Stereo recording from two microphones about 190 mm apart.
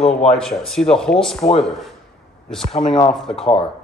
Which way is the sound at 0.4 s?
Centre (ahead or behind).